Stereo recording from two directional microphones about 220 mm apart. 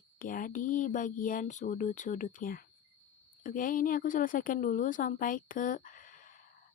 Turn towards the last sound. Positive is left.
turn(degrees=35)  # may be behind; listen again after turning